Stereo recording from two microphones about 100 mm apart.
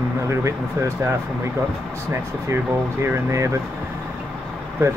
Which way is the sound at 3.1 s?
30° right (ahead or behind).